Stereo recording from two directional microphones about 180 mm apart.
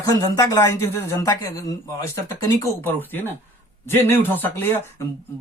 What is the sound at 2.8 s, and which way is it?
Speech, 10° left (ahead or behind).